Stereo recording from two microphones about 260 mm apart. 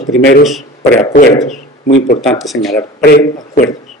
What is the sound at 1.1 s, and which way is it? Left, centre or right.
Speech, left.